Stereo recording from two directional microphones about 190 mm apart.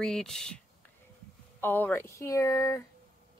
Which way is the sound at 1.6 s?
10° left (ahead or behind).